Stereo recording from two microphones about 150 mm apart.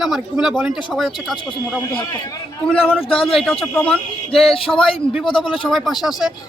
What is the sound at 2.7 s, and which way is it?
Speech, 5° left (ahead or behind).